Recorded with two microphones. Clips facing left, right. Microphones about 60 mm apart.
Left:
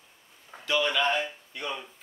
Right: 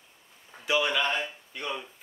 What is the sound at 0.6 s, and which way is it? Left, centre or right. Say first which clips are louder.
Speech: even; centre.